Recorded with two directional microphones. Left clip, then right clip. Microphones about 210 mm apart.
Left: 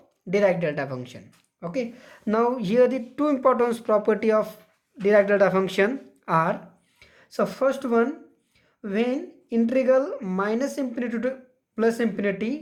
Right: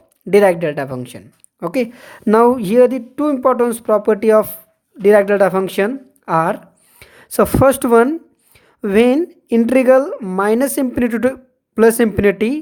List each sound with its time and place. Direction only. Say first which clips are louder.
0.3 s a woman's voice: right 9 dB; 35° right (ahead or behind)